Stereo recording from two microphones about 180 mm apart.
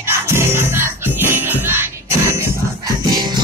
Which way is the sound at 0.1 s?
15° right (ahead or behind).